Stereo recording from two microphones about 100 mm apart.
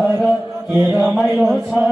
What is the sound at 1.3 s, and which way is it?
Speech, 20° right (ahead or behind).